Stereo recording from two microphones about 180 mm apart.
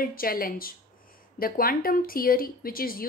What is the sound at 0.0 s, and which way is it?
A woman's voice, 55° left (ahead or behind).